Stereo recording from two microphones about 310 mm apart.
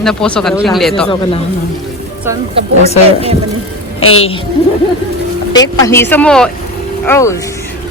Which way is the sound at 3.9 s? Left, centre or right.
Left.